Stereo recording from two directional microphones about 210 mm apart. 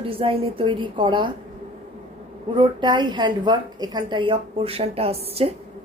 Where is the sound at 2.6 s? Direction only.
20° right (ahead or behind).